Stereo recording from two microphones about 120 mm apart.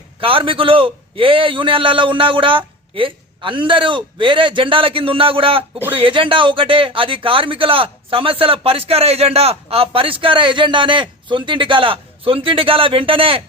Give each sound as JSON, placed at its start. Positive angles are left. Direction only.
{"t": 0.2, "sound": "speech", "side_deg": -50}